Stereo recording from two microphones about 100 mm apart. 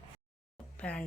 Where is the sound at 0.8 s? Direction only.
10° left (ahead or behind).